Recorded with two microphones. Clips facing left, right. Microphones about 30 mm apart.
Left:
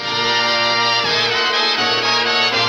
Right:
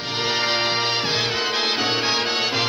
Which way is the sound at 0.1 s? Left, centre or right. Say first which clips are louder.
Left 5 dB; left.